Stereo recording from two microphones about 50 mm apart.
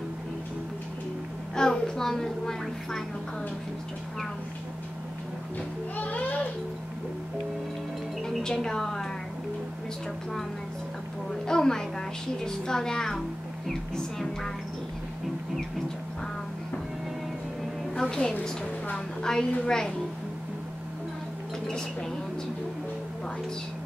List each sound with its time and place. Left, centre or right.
1.5 s a woman's voice: centre
5.9 s a child's voice: left
8.3 s speech: centre
11.4 s a woman's voice: centre
17.9 s a woman's voice: centre